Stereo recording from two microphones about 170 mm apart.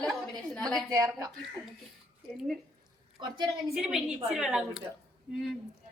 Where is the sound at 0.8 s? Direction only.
20° right (ahead or behind).